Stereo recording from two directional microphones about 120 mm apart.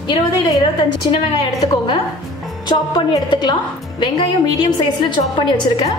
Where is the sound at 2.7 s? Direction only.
40° left (ahead or behind).